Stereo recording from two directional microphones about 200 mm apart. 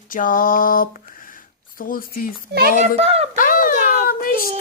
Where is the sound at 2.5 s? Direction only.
55° right (ahead or behind).